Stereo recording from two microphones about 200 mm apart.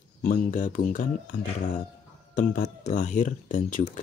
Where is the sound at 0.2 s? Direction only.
40° left (ahead or behind).